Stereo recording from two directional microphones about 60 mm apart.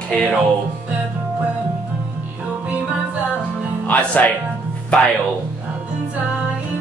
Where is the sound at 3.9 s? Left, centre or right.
Left.